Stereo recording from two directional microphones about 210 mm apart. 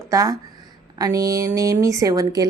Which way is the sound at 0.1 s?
15° right (ahead or behind).